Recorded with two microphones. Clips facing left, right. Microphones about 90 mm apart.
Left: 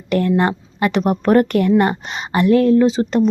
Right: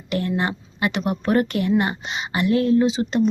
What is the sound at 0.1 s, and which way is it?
A woman's voice, 45° left (ahead or behind).